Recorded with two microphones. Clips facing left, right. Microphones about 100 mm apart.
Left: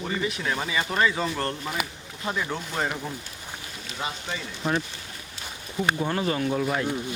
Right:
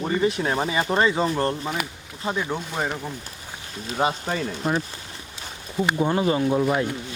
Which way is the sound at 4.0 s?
50° right (ahead or behind).